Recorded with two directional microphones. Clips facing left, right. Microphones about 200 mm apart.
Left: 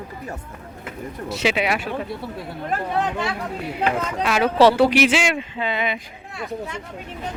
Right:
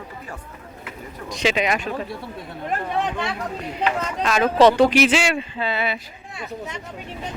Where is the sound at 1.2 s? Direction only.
5° left (ahead or behind).